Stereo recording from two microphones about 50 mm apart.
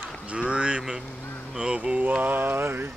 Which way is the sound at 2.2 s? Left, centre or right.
Right.